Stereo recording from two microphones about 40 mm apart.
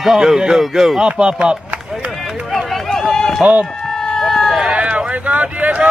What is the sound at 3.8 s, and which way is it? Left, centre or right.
Chicken, centre.